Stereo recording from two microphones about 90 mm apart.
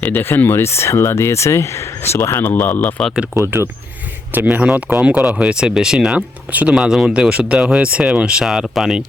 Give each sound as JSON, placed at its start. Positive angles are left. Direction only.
{"t": 0.0, "sound": "speech", "side_deg": 20}
{"t": 3.3, "sound": "speech", "side_deg": -30}
{"t": 4.4, "sound": "speech", "side_deg": -15}
{"t": 6.7, "sound": "speech", "side_deg": -5}